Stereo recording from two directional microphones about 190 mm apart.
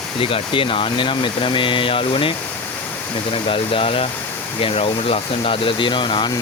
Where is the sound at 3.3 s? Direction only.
30° left (ahead or behind).